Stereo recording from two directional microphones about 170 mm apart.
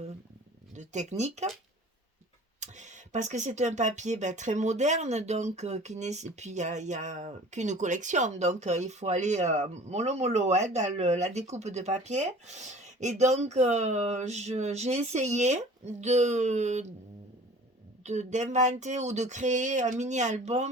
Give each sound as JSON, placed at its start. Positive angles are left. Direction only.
{"t": 0.8, "sound": "speech", "side_deg": -40}
{"t": 2.6, "sound": "speech", "side_deg": -45}
{"t": 18.0, "sound": "speech", "side_deg": -45}